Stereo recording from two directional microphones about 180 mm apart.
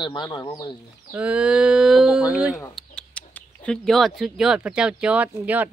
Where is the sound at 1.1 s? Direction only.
5° right (ahead or behind).